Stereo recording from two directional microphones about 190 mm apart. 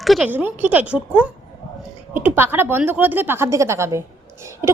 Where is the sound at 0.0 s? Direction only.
Centre (ahead or behind).